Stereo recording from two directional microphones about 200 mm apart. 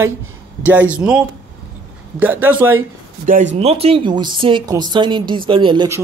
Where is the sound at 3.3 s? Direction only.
40° right (ahead or behind).